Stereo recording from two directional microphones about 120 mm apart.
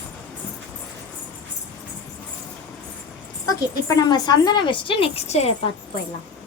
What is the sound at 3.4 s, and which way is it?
A woman's voice, 30° left (ahead or behind).